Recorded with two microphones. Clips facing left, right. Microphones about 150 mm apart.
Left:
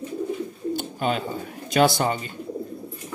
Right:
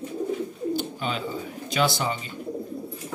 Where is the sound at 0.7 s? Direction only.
50° left (ahead or behind).